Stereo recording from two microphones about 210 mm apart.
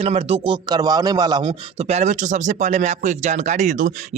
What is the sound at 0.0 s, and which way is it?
Speech, 30° right (ahead or behind).